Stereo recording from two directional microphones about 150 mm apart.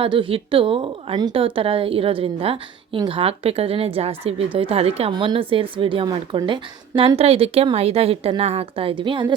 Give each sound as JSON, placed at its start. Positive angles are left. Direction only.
{"t": 0.0, "sound": "speech", "side_deg": -35}